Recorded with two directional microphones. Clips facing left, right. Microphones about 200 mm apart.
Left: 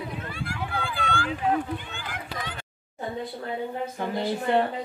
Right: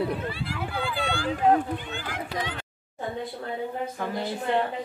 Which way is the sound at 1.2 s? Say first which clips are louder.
Right 6 dB; 40° right (ahead or behind).